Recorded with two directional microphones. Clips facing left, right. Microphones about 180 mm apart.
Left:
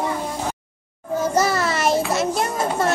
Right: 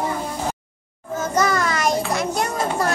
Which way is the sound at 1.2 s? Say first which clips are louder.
Left 1 dB; 5° left (ahead or behind).